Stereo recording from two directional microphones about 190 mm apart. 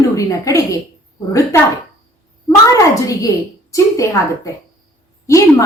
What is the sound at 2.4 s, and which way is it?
A woman's voice, 15° left (ahead or behind).